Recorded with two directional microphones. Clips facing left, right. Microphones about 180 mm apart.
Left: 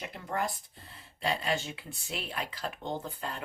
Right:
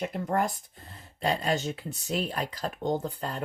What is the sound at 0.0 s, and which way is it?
Speech, 45° right (ahead or behind).